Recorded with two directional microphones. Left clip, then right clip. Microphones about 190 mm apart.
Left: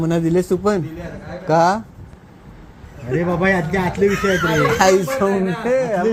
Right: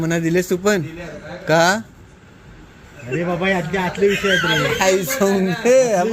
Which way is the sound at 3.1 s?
55° left (ahead or behind).